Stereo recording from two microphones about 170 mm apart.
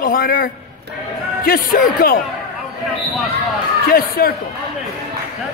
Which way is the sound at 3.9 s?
60° left (ahead or behind).